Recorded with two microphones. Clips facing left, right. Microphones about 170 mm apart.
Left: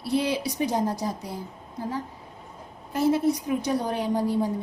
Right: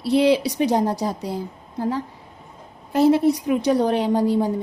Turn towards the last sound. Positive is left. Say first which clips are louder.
# right 5 dB
turn(degrees=-75)  # may be behind; listen again after turning